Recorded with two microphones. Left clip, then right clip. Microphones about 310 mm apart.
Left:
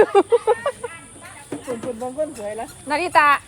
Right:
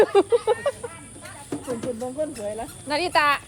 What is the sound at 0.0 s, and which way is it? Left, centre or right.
Speech, left.